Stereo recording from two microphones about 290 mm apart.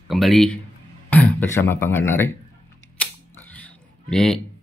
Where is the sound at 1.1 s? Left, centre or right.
Centre.